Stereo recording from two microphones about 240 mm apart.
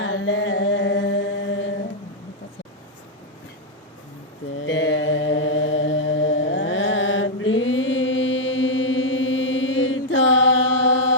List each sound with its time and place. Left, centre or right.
0.0 s chant: left
4.6 s mantra: left